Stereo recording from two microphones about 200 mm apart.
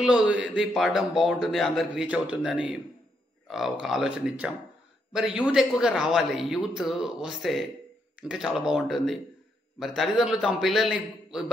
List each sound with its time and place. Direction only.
0.0 s speech: 5° right (ahead or behind)